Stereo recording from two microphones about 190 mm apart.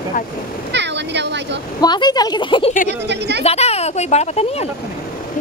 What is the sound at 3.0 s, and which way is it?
Speech, 65° right (ahead or behind).